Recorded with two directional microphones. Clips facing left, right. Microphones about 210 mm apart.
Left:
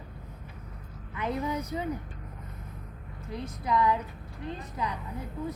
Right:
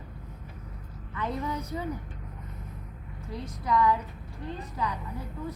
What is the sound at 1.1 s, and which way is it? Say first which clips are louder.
Speech: left 1 dB; 20° left (ahead or behind).